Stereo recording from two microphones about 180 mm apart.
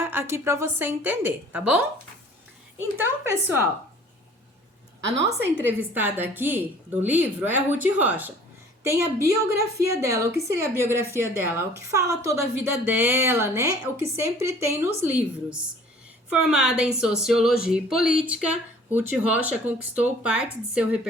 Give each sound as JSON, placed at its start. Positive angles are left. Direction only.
{"t": 0.0, "sound": "a woman's voice", "side_deg": -15}
{"t": 3.0, "sound": "a woman's voice", "side_deg": -15}
{"t": 5.0, "sound": "a woman's voice", "side_deg": -80}
{"t": 5.9, "sound": "a woman's voice", "side_deg": -10}